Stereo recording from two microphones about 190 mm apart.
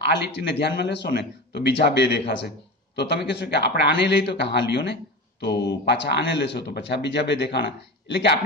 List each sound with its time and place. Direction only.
0.3 s speech: 65° left (ahead or behind)